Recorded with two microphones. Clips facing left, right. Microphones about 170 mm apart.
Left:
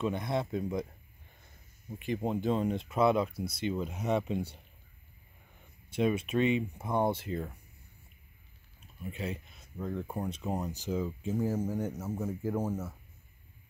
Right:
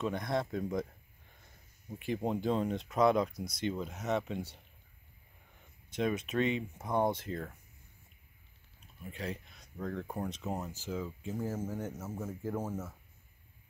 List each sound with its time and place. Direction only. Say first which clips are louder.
0.0 s speech: left 2 dB; 5° left (ahead or behind)
1.9 s speech: left 1 dB; centre (ahead or behind)
5.9 s speech: left 4 dB; 10° left (ahead or behind)
9.2 s speech: left 1 dB; 5° left (ahead or behind)